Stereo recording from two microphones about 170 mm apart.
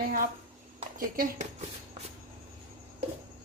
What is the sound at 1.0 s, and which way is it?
Speech, 55° right (ahead or behind).